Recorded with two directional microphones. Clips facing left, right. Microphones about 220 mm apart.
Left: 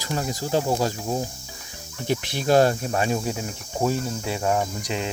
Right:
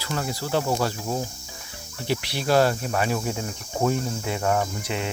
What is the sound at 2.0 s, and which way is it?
Speech, 45° left (ahead or behind).